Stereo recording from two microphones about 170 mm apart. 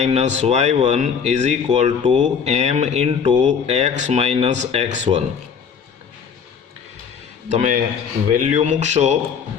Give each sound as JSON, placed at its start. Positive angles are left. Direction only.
{"t": 0.0, "sound": "speech", "side_deg": -40}
{"t": 7.5, "sound": "speech", "side_deg": -50}